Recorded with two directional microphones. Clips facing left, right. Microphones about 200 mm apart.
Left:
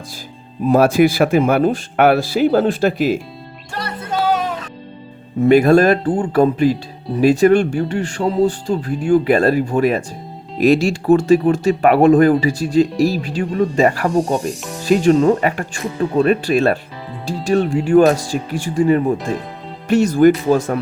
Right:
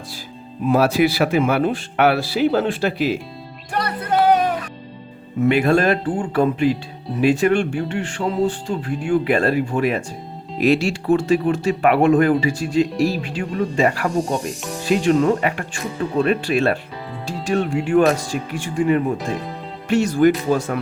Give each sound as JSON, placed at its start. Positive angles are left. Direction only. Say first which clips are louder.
{"t": 0.7, "sound": "speech", "louder": "left 4 dB", "side_deg": 50}
{"t": 3.8, "sound": "music", "louder": "right 3 dB", "side_deg": 25}
{"t": 5.4, "sound": "speech", "louder": "left 5 dB", "side_deg": 40}